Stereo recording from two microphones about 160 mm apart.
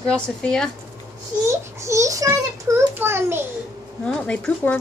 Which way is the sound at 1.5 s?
20° right (ahead or behind).